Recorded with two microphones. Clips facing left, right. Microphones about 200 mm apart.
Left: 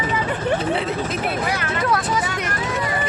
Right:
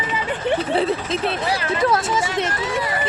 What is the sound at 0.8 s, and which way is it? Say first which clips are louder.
Hubbub: right 3 dB; 30° right (ahead or behind).